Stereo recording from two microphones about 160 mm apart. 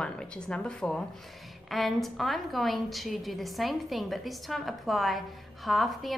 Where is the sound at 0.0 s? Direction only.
5° left (ahead or behind).